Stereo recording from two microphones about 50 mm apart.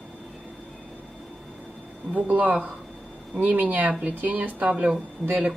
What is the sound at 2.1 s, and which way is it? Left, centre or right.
Speech, right.